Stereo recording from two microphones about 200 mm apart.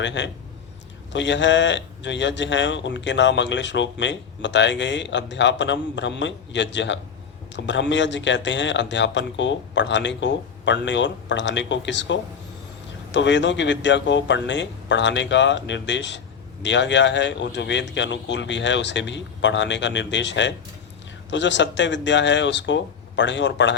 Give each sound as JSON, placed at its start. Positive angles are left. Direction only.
{"t": 0.0, "sound": "speech", "side_deg": 65}